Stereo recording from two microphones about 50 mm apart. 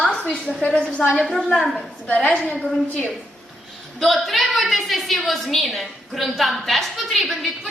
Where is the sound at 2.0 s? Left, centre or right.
Left.